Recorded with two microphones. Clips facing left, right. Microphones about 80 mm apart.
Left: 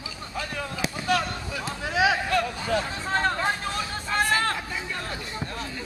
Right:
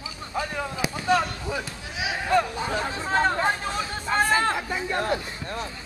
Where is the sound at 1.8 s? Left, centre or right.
Left.